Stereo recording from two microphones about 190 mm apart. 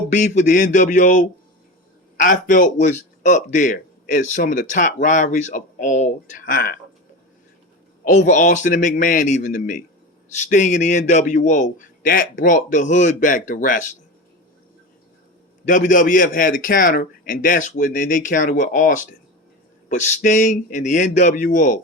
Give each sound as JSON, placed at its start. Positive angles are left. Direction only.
{"t": 0.1, "sound": "speech", "side_deg": 40}
{"t": 8.0, "sound": "a man's voice", "side_deg": 40}
{"t": 15.6, "sound": "a man's voice", "side_deg": 45}